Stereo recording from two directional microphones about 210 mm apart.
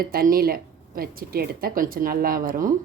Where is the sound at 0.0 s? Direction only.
45° right (ahead or behind).